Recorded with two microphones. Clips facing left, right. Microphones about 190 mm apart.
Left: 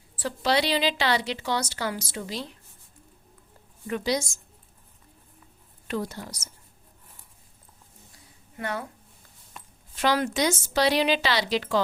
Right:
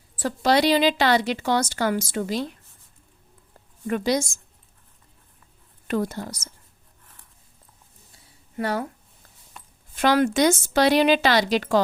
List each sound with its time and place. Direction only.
0.2 s a woman's voice: 45° right (ahead or behind)
3.8 s a woman's voice: 55° right (ahead or behind)
5.9 s a woman's voice: 50° right (ahead or behind)
8.1 s a sound: 35° right (ahead or behind)
9.9 s a woman's voice: 50° right (ahead or behind)